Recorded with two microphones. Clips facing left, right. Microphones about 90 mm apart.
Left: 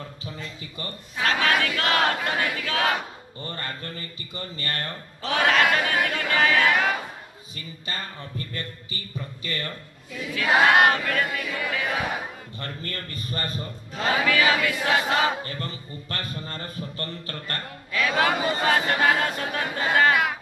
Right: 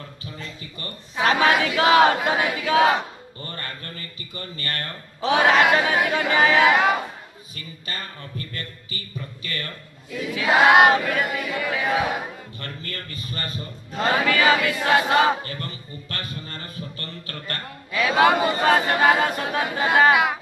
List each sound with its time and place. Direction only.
1.1 s a sound: 20° right (ahead or behind)
3.4 s speech: 20° left (ahead or behind)
5.2 s a sound: 15° right (ahead or behind)
7.9 s a man's voice: 25° left (ahead or behind)
10.3 s a sound: 15° right (ahead or behind)
12.5 s a man's voice: 30° left (ahead or behind)
13.9 s speech: centre (ahead or behind)
15.4 s a man's voice: 30° left (ahead or behind)
17.9 s speech: 5° right (ahead or behind)